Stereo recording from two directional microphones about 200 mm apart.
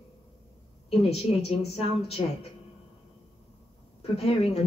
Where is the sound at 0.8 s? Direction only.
30° left (ahead or behind).